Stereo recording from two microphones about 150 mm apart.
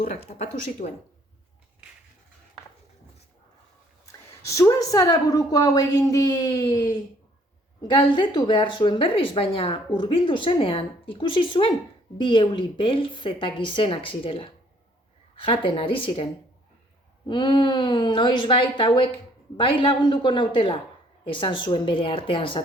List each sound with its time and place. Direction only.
0.1 s speech: 50° left (ahead or behind)
4.0 s a woman's voice: 20° left (ahead or behind)